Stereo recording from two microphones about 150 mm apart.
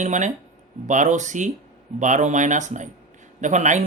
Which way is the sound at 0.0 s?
55° right (ahead or behind).